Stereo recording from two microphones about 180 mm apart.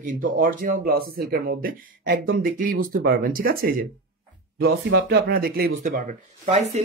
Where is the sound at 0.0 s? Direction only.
50° right (ahead or behind).